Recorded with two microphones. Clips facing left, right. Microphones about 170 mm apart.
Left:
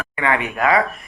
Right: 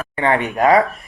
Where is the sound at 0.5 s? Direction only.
40° right (ahead or behind).